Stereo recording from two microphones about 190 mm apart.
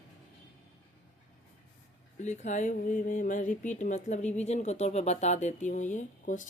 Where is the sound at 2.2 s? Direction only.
40° left (ahead or behind).